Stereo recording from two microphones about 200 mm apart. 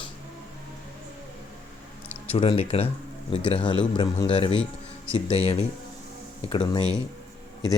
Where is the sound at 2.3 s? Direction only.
30° left (ahead or behind).